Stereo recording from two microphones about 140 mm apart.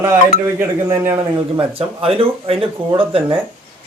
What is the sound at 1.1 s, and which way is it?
Speech, 40° right (ahead or behind).